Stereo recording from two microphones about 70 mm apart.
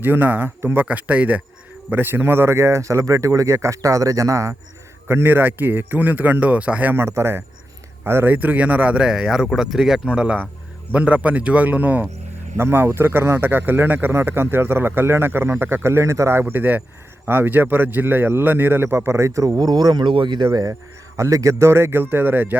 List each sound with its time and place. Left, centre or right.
0.0 s a man's voice: right
0.9 s a man's voice: centre
1.9 s speech: right
5.0 s a man's voice: right
6.9 s a man's voice: right; by 10.0 s centre
10.1 s a man's voice: centre; by 16.4 s right
16.4 s a man's voice: right
20.5 s speech: right